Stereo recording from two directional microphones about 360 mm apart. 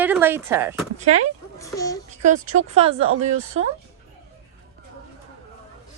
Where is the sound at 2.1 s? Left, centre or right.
Centre.